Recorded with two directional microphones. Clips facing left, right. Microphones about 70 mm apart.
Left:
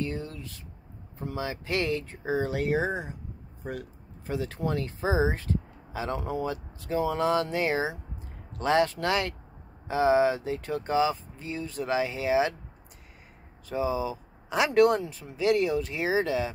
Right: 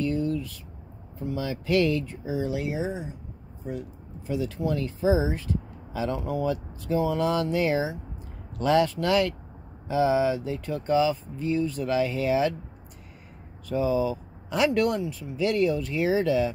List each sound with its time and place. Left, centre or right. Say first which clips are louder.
0.0 s a sound: right 7 dB; left
1.3 s speech: right 6 dB; left
2.2 s speech: left 4 dB; left
4.3 s speech: right 2 dB; left
13.7 s speech: right 4 dB; left